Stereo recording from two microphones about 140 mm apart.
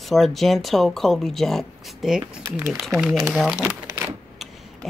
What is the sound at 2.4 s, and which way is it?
Speech, 20° right (ahead or behind).